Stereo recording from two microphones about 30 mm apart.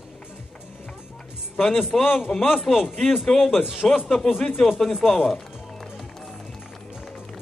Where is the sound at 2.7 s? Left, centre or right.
Centre.